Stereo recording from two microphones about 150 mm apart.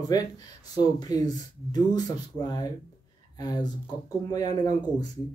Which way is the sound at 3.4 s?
25° left (ahead or behind).